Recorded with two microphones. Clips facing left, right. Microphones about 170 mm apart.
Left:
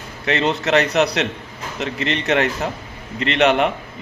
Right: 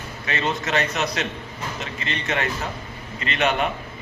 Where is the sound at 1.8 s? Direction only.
85° left.